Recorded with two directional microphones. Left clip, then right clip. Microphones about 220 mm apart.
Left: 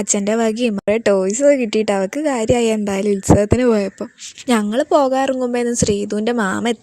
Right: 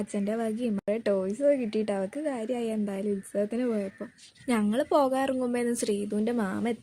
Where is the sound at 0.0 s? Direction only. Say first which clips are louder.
Left 13 dB; 40° left (ahead or behind).